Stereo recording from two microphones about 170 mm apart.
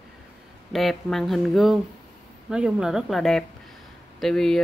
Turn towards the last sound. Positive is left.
turn(degrees=5)  # may be behind; listen again after turning